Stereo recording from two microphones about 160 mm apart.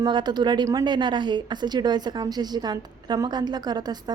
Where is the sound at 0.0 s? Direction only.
30° right (ahead or behind).